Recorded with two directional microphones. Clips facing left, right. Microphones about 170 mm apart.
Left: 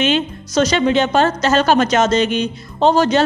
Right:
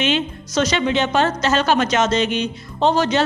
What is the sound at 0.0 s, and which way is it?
A woman's voice, 40° left (ahead or behind).